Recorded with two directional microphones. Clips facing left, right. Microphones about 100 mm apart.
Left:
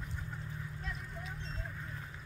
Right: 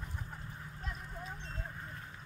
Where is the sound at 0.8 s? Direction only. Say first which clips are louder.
Even; 35° right (ahead or behind).